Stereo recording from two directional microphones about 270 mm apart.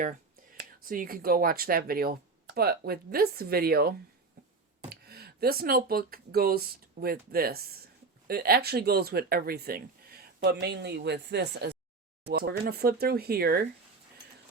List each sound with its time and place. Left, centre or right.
0.9 s speech: right